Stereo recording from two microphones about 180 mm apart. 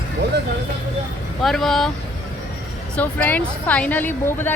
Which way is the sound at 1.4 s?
Centre (ahead or behind).